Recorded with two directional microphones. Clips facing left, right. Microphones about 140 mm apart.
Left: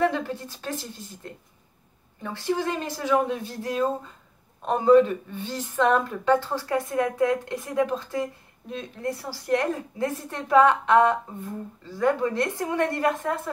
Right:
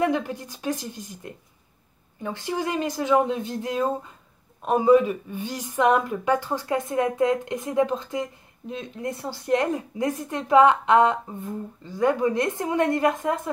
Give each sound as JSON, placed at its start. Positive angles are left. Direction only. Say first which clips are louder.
{"t": 0.0, "sound": "a woman's voice", "louder": "right 1 dB", "side_deg": -15}
{"t": 4.6, "sound": "a woman's voice", "louder": "even", "side_deg": -5}